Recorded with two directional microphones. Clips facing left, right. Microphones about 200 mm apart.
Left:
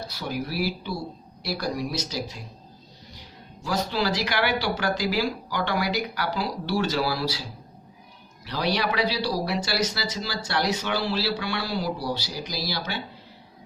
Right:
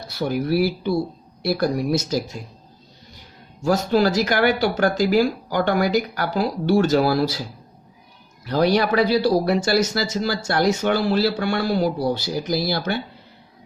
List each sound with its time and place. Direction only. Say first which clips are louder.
0.1 s speech: right 12 dB; 55° right (ahead or behind)
8.4 s speech: right 8 dB; 50° right (ahead or behind)